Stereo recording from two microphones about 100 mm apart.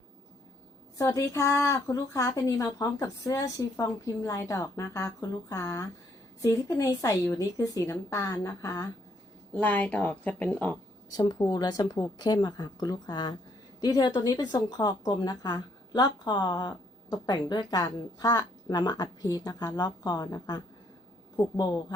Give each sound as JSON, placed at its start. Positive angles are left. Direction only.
{"t": 0.9, "sound": "a woman's voice", "side_deg": 30}
{"t": 9.5, "sound": "a woman's voice", "side_deg": 15}
{"t": 11.1, "sound": "a woman's voice", "side_deg": 45}